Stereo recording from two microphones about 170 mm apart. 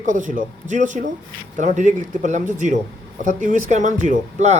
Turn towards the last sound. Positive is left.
turn(degrees=-45)  # may be behind; listen again after turning